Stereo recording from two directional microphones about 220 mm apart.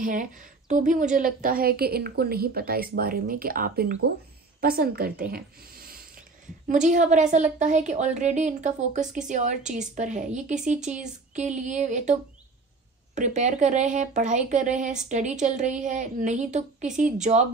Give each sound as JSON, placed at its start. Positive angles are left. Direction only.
{"t": 0.0, "sound": "speech", "side_deg": -35}
{"t": 5.3, "sound": "a sound", "side_deg": -40}
{"t": 6.7, "sound": "speech", "side_deg": -35}